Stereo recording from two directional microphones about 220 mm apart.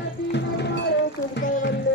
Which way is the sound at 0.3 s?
50° left (ahead or behind).